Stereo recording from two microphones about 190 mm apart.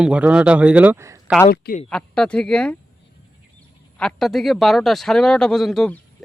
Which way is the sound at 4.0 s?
5° left (ahead or behind).